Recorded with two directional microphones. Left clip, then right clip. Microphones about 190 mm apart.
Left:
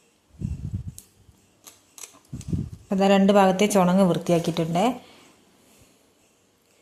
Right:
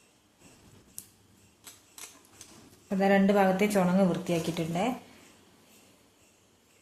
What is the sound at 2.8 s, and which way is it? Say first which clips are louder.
A woman's voice: left 5 dB; 35° left (ahead or behind).